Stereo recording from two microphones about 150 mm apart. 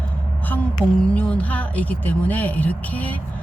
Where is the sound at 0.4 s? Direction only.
10° left (ahead or behind).